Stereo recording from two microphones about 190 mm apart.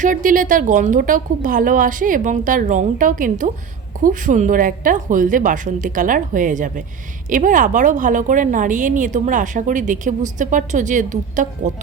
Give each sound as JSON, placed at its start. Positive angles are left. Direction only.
{"t": 0.0, "sound": "a woman's voice", "side_deg": -45}